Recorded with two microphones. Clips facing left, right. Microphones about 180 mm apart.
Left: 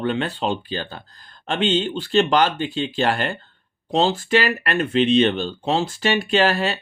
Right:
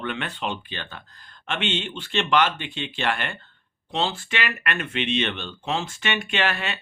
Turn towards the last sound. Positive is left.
turn(degrees=35)  # may be behind; listen again after turning